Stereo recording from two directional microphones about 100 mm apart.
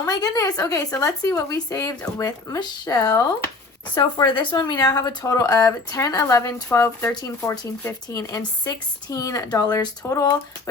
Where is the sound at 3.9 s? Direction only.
55° left (ahead or behind); by 7.1 s 30° left (ahead or behind).